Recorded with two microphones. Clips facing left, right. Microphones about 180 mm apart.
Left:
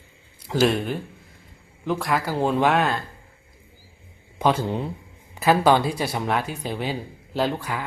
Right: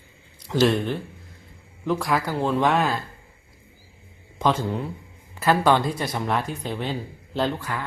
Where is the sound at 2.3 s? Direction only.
15° left (ahead or behind).